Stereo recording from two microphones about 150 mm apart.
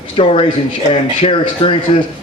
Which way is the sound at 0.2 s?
40° left (ahead or behind).